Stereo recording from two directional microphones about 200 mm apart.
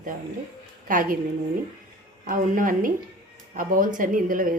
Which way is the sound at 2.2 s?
45° right (ahead or behind).